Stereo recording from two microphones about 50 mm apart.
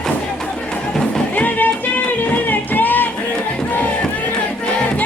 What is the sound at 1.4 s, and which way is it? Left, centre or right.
Music, left.